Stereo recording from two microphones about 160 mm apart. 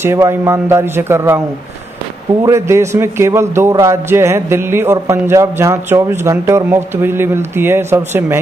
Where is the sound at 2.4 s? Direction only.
15° right (ahead or behind).